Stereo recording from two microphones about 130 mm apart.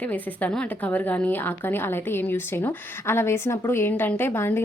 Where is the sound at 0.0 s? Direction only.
10° left (ahead or behind).